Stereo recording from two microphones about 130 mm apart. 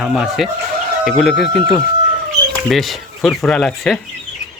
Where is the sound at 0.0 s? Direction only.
5° right (ahead or behind).